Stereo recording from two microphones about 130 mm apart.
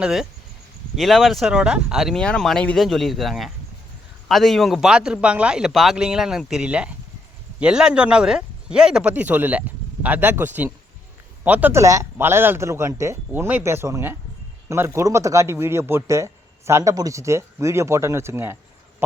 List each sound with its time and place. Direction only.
0.0 s speech: 5° right (ahead or behind)
11.8 s speech: 25° right (ahead or behind)